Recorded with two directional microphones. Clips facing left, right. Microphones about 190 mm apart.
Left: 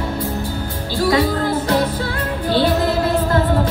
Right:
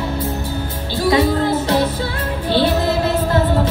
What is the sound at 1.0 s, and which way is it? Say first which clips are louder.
Music: right 1 dB; 25° right (ahead or behind).